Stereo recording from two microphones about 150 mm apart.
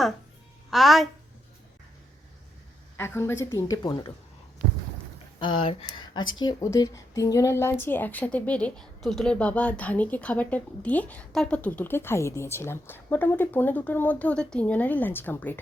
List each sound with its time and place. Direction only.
0.7 s a woman's voice: centre (ahead or behind)
3.0 s a woman's voice: 15° left (ahead or behind)
4.6 s a sound: 50° right (ahead or behind)
5.4 s a woman's voice: 35° left (ahead or behind); by 15.5 s 10° left (ahead or behind)